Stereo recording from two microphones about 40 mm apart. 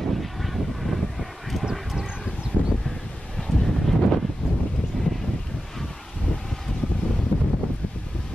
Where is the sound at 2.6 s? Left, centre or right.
Right.